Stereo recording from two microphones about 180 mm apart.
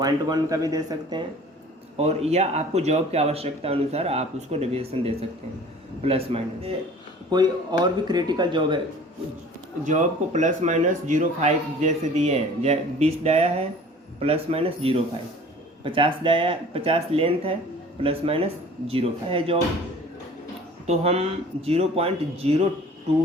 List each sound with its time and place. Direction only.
0.0 s speech: 20° right (ahead or behind)
2.0 s speech: 35° right (ahead or behind)
9.8 s speech: 45° right (ahead or behind)
20.8 s speech: 35° right (ahead or behind)